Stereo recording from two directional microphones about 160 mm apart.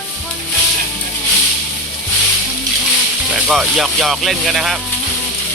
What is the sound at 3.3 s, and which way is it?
Speech, 5° right (ahead or behind).